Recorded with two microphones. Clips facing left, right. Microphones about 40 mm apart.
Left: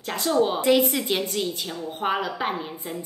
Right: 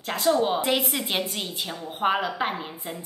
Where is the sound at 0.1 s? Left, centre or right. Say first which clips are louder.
Even; centre.